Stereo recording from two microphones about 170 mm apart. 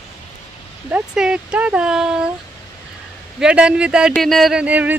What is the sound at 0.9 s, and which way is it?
Speech, 5° right (ahead or behind).